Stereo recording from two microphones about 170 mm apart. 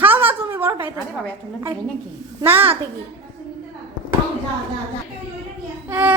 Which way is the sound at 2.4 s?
10° right (ahead or behind).